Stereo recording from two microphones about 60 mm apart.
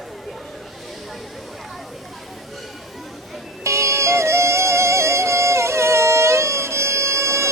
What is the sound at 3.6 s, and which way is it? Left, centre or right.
Music, right.